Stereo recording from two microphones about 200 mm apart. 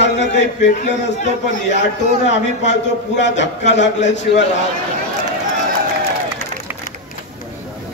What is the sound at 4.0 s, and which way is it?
Speech, 35° left (ahead or behind).